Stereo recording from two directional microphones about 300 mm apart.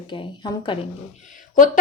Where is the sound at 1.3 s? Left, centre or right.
Left.